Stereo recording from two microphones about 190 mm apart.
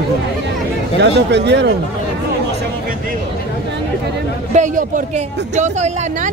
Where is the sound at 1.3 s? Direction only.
65° right (ahead or behind).